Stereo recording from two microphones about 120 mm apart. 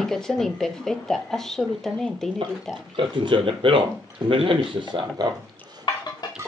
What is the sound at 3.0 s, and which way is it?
Speech, 45° right (ahead or behind).